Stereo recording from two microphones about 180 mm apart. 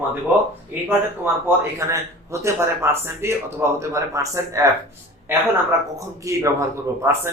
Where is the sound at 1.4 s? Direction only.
15° right (ahead or behind).